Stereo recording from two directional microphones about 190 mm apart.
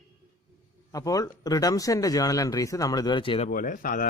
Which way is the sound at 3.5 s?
45° left (ahead or behind).